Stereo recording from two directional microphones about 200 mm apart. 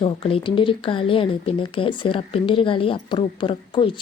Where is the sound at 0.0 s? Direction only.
25° left (ahead or behind).